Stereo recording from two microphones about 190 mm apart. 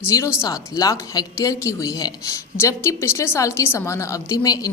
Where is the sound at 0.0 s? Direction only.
15° left (ahead or behind).